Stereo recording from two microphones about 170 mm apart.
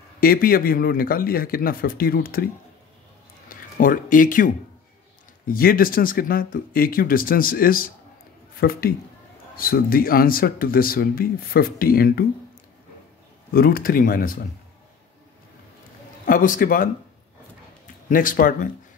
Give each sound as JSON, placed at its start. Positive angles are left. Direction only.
{"t": 0.2, "sound": "speech", "side_deg": 60}
{"t": 3.4, "sound": "speech", "side_deg": 55}
{"t": 13.5, "sound": "speech", "side_deg": 60}
{"t": 16.3, "sound": "a man's voice", "side_deg": 55}
{"t": 18.1, "sound": "a man's voice", "side_deg": 55}